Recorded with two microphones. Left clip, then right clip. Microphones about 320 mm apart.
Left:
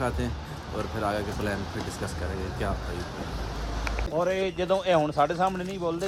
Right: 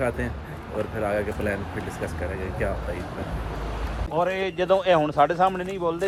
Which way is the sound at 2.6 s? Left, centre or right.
Centre.